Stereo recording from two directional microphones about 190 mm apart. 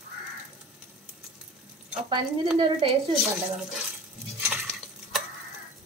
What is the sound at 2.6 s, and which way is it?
Speech, 30° right (ahead or behind).